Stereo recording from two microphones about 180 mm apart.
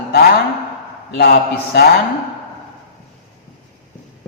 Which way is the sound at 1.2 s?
60° left (ahead or behind).